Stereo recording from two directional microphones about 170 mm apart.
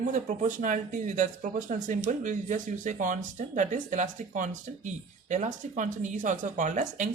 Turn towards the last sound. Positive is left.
turn(degrees=-50)  # may be behind; listen again after turning